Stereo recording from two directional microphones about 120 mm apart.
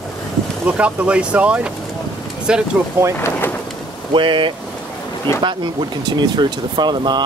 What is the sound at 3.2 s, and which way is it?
Bird, 20° left (ahead or behind).